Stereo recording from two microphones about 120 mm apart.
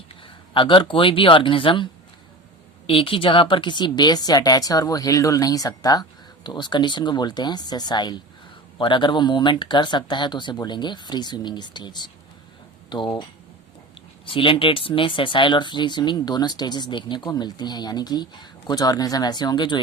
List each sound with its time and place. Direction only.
0.2 s speech: 45° left (ahead or behind)
14.3 s speech: 45° left (ahead or behind)